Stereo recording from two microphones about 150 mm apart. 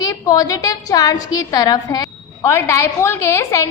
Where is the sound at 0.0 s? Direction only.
25° left (ahead or behind).